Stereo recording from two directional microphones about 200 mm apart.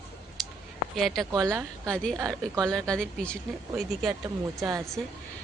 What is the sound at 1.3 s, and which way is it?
Speech, 15° right (ahead or behind).